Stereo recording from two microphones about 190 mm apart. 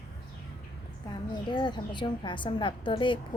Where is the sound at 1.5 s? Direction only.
25° left (ahead or behind).